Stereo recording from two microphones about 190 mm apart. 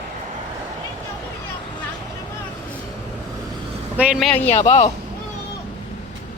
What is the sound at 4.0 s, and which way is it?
Speech, 5° right (ahead or behind).